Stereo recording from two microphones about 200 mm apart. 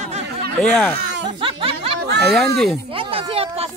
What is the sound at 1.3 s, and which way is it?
Snicker, 25° right (ahead or behind).